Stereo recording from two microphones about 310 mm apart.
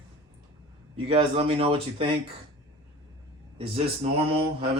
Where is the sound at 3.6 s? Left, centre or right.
Centre.